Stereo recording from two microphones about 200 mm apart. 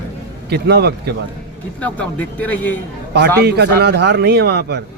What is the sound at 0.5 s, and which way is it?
Speech, 55° right (ahead or behind).